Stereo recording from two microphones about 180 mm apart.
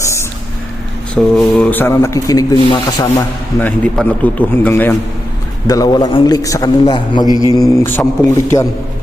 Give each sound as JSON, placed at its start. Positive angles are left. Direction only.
{"t": 0.0, "sound": "a sound", "side_deg": 15}
{"t": 1.1, "sound": "speech", "side_deg": 5}
{"t": 3.6, "sound": "a man's voice", "side_deg": 10}
{"t": 7.8, "sound": "a man's voice", "side_deg": 10}